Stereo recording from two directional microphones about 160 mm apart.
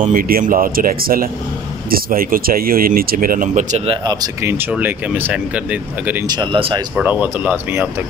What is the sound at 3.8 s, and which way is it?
Speech, 30° right (ahead or behind).